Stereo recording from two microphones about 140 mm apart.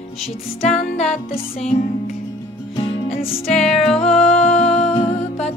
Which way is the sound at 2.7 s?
40° left (ahead or behind).